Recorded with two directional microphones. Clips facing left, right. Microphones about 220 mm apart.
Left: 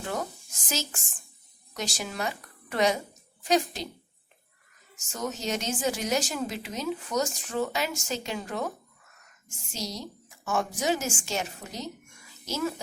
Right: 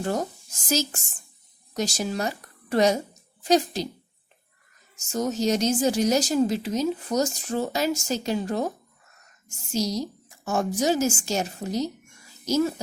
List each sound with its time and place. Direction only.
0.0 s a woman's voice: 35° right (ahead or behind)
5.1 s speech: 40° right (ahead or behind)
9.7 s speech: 40° right (ahead or behind)